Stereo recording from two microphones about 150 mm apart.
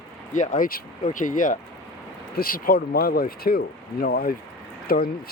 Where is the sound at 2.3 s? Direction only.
75° left (ahead or behind).